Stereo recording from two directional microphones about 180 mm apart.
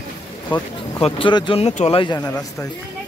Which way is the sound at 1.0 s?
30° left (ahead or behind).